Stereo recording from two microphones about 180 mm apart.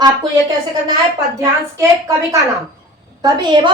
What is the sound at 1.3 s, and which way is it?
A woman's voice, 15° right (ahead or behind).